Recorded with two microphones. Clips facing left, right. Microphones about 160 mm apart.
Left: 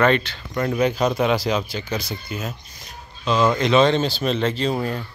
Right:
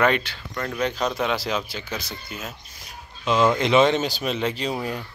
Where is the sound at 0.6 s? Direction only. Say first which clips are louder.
Left 6 dB; 10° left (ahead or behind).